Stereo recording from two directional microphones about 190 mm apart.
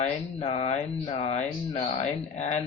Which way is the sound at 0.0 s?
30° left (ahead or behind).